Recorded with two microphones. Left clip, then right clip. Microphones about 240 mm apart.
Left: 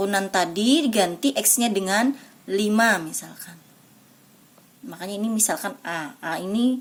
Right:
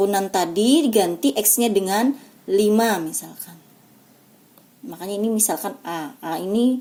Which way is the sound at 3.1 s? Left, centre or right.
Left.